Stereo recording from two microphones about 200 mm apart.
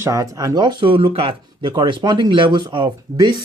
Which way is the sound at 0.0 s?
15° right (ahead or behind).